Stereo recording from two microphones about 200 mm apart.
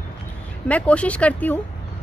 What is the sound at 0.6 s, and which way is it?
Speech, 5° left (ahead or behind).